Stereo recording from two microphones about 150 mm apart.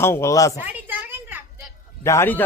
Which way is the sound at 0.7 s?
10° right (ahead or behind).